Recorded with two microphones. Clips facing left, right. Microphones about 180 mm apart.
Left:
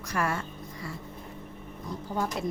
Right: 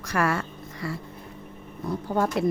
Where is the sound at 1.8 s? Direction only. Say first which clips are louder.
Right 6 dB; 65° right (ahead or behind).